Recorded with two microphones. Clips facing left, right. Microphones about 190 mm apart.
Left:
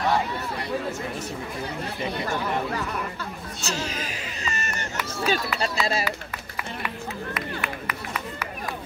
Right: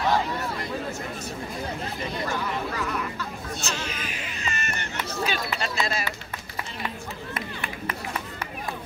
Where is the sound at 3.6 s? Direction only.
40° left (ahead or behind).